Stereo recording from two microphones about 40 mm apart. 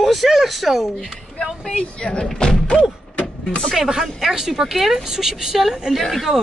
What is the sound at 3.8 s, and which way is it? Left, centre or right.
Speech, centre.